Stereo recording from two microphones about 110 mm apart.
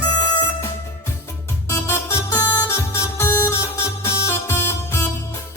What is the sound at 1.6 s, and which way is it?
Music, 25° left (ahead or behind).